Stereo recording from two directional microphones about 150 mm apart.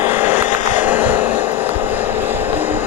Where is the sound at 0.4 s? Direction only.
55° left (ahead or behind).